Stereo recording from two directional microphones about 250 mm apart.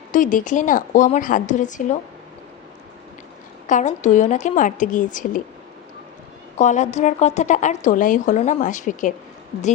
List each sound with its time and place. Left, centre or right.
0.1 s a woman's voice: left
3.7 s a woman's voice: left
6.6 s a woman's voice: left